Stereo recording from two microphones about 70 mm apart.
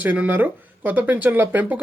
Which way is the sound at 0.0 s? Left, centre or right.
Right.